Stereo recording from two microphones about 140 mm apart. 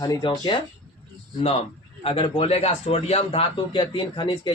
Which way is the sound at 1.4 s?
45° left (ahead or behind).